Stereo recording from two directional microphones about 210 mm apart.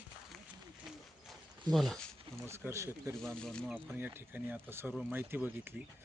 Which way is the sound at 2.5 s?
10° right (ahead or behind).